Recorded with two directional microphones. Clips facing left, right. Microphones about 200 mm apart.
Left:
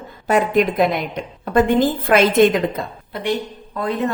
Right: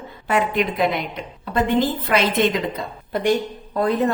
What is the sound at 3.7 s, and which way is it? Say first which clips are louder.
Speech: right 2 dB; 40° right (ahead or behind).